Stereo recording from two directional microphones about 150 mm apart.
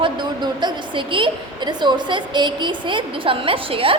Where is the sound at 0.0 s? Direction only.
30° right (ahead or behind).